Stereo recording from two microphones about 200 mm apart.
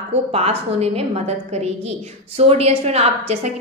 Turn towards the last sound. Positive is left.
turn(degrees=-30)  # may be behind; listen again after turning